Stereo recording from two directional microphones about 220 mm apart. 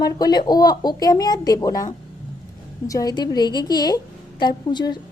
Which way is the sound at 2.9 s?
15° left (ahead or behind).